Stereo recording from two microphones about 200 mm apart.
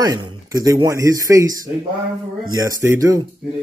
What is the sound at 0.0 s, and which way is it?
Speech, 20° right (ahead or behind).